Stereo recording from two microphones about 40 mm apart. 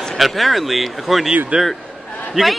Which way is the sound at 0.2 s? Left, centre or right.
Centre.